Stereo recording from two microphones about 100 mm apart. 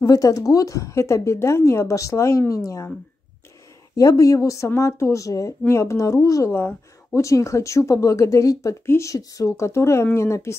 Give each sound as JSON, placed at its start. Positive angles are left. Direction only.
{"t": 0.0, "sound": "a woman's voice", "side_deg": 35}
{"t": 3.9, "sound": "a woman's voice", "side_deg": 35}